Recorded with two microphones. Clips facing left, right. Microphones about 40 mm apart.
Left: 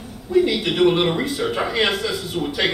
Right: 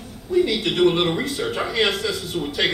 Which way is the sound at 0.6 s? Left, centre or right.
Centre.